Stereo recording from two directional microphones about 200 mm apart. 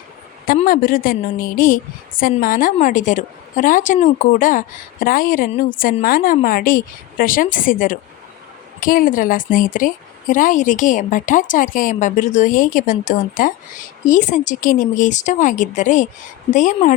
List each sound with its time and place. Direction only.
0.4 s a woman's voice: 45° left (ahead or behind)